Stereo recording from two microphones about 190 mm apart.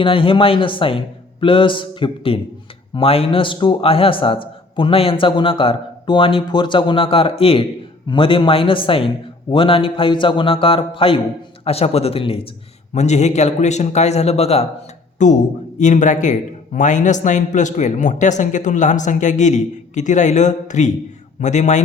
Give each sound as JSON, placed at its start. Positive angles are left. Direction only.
{"t": 0.0, "sound": "a man's voice", "side_deg": 30}